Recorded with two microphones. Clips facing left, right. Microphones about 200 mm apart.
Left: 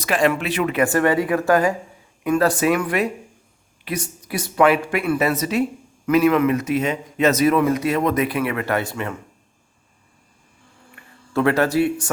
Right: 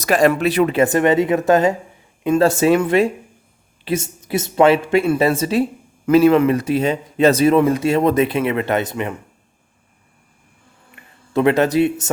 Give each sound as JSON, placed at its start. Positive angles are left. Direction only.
{"t": 0.0, "sound": "speech", "side_deg": -40}
{"t": 11.0, "sound": "a sound", "side_deg": -20}
{"t": 11.3, "sound": "speech", "side_deg": -20}